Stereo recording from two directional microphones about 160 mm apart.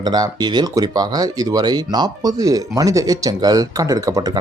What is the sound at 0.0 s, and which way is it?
Speech, 25° right (ahead or behind).